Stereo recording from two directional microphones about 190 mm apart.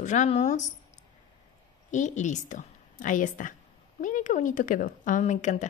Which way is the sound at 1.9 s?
40° left (ahead or behind).